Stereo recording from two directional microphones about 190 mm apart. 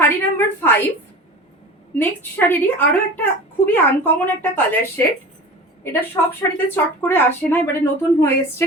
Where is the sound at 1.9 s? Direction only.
10° left (ahead or behind).